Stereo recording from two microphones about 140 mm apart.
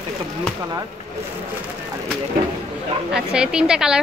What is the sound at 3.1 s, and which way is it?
Speech, 5° right (ahead or behind).